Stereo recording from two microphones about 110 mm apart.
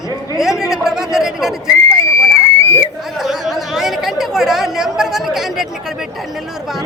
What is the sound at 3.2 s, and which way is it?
Chatter, centre (ahead or behind).